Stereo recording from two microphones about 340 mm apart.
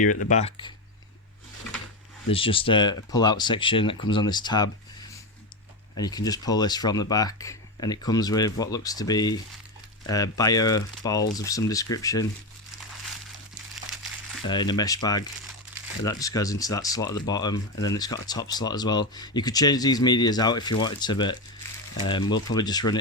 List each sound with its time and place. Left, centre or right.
0.3 s speech: centre
2.3 s speech: centre
6.0 s speech: centre
13.7 s crumpling: centre
14.4 s speech: centre